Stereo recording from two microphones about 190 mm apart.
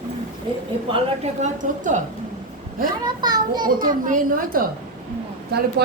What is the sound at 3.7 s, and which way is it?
Speech, 45° right (ahead or behind).